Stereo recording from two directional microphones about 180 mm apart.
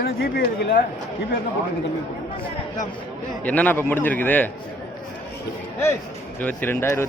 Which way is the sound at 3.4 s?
10° left (ahead or behind).